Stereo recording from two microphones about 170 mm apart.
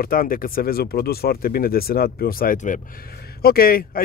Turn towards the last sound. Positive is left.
turn(degrees=60)  # may be behind; listen again after turning